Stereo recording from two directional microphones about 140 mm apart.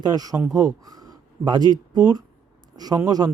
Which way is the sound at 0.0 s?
25° right (ahead or behind).